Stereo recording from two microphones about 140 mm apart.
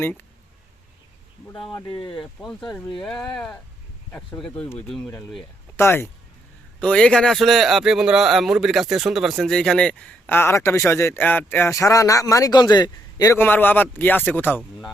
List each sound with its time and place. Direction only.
2.0 s speech: 40° left (ahead or behind)
2.2 s speech: centre (ahead or behind)
5.7 s a man's voice: 15° left (ahead or behind)
13.3 s a man's voice: 15° left (ahead or behind)